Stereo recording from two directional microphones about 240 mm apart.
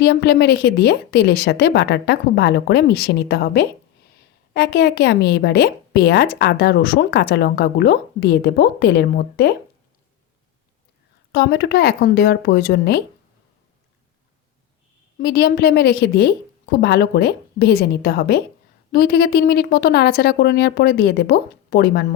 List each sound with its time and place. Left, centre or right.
0.0 s a woman's voice: left
11.3 s a woman's voice: left
15.2 s a woman's voice: left